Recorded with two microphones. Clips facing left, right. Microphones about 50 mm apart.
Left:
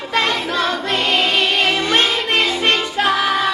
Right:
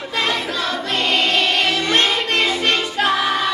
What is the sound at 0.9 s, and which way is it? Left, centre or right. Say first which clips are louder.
Music: right 1 dB; centre.